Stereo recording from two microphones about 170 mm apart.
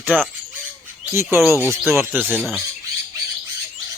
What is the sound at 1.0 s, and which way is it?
Speech, 15° right (ahead or behind).